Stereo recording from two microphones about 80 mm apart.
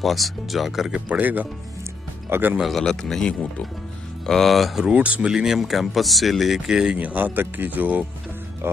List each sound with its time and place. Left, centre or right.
0.0 s speech: centre
0.9 s speech: centre
2.6 s speech: centre
4.9 s speech: centre